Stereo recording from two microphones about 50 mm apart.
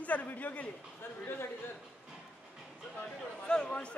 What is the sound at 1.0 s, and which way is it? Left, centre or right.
Speech, left.